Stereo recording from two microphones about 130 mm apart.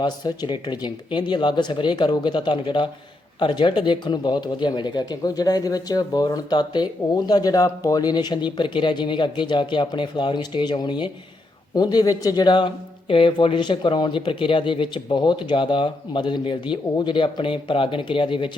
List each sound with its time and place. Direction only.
0.0 s speech: 35° left (ahead or behind)